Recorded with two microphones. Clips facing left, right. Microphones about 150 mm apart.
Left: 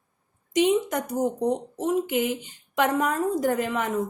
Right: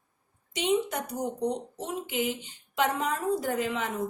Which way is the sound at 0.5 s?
50° left (ahead or behind).